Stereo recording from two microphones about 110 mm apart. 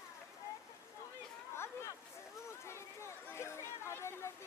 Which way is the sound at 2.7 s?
25° left (ahead or behind).